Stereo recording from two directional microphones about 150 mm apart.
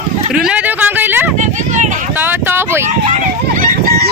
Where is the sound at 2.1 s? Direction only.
15° right (ahead or behind).